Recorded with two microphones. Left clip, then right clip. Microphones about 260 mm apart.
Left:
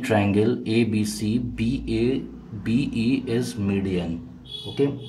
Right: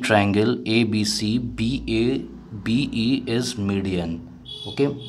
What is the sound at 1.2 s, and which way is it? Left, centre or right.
Speech, centre.